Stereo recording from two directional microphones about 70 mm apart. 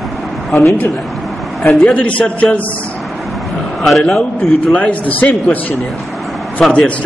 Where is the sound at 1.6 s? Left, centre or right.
Centre.